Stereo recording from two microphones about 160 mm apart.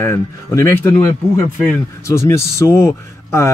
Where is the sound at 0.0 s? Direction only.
15° left (ahead or behind).